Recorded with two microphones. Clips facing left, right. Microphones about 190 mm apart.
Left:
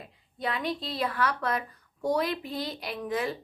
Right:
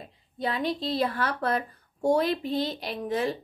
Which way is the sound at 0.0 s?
25° right (ahead or behind).